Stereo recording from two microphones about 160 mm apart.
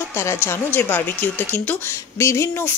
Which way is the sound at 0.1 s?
15° left (ahead or behind).